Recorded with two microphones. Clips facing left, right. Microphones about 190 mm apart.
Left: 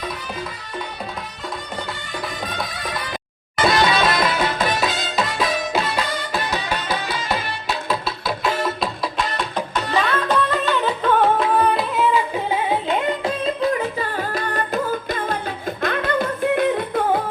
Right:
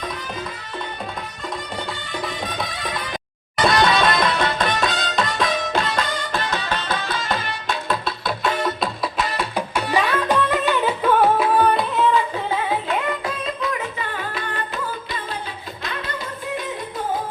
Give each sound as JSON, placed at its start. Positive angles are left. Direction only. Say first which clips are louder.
{"t": 3.6, "sound": "music", "louder": "even", "side_deg": 0}
{"t": 13.1, "sound": "music", "louder": "left 4 dB", "side_deg": 30}